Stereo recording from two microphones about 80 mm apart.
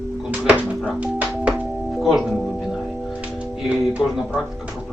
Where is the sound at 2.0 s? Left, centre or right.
Centre.